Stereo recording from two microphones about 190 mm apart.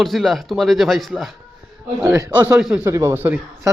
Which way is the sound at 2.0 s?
15° right (ahead or behind).